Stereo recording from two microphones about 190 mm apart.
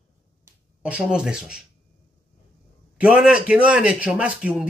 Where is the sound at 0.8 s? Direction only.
5° right (ahead or behind).